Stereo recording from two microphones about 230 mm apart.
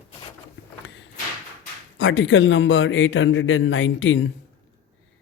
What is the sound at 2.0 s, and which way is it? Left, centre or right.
Speech, left.